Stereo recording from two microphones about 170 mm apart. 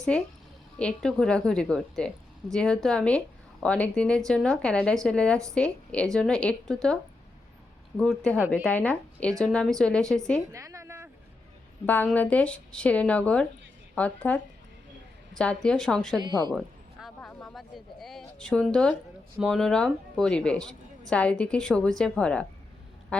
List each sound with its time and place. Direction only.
0.1 s a woman's voice: 5° left (ahead or behind)
7.9 s a woman's voice: 5° left (ahead or behind)
10.5 s a sound: 20° right (ahead or behind)
11.9 s a woman's voice: 10° left (ahead or behind)
15.4 s a woman's voice: 5° left (ahead or behind)
16.1 s a woman's voice: 25° right (ahead or behind)
17.2 s a woman's voice: 5° left (ahead or behind)